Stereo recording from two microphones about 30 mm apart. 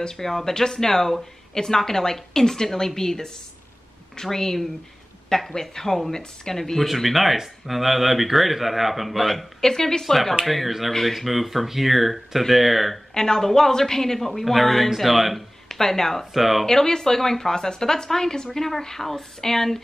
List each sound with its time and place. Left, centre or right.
0.0 s speech: centre
6.6 s speech: centre
9.6 s speech: centre
10.0 s speech: centre
11.1 s speech: centre
13.1 s speech: centre
14.4 s speech: centre
15.7 s speech: centre
16.3 s speech: centre
16.6 s speech: centre